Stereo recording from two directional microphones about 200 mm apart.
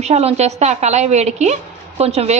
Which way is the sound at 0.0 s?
30° right (ahead or behind).